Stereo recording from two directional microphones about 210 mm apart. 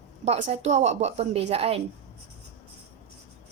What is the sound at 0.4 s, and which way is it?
A woman's voice, 35° right (ahead or behind).